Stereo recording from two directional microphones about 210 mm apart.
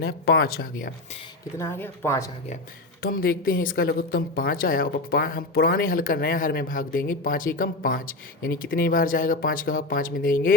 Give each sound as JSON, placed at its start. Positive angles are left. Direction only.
{"t": 0.0, "sound": "a woman's voice", "side_deg": 50}
{"t": 1.5, "sound": "speech", "side_deg": 10}
{"t": 3.0, "sound": "a woman's voice", "side_deg": 45}